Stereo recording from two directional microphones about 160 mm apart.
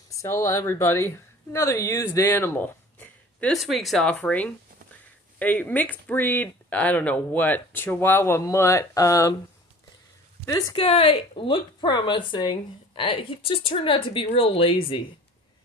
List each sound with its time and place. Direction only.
0.2 s speech: 20° left (ahead or behind)
3.5 s speech: centre (ahead or behind); by 9.3 s 20° left (ahead or behind)
10.4 s speech: 25° left (ahead or behind)
10.8 s speech: 40° left (ahead or behind)